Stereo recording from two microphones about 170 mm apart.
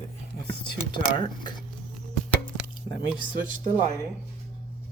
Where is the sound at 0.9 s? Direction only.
25° left (ahead or behind).